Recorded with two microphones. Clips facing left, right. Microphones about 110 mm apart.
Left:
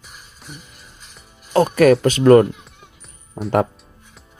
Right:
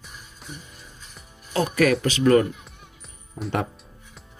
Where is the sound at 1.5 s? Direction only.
45° left (ahead or behind).